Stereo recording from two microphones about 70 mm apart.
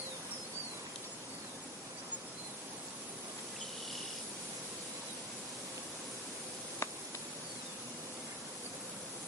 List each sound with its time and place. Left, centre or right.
6.8 s cricket: left